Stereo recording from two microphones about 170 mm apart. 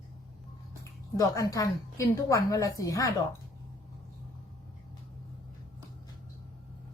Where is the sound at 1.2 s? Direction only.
20° left (ahead or behind).